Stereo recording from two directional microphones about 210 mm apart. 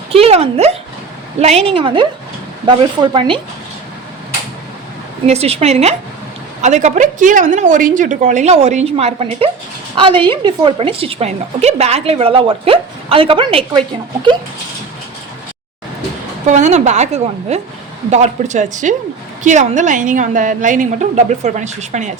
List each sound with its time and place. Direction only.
0.1 s dog: 30° right (ahead or behind)
1.4 s a woman's voice: 30° right (ahead or behind)
5.2 s a woman's voice: 30° right (ahead or behind)
16.5 s a woman's voice: 35° right (ahead or behind)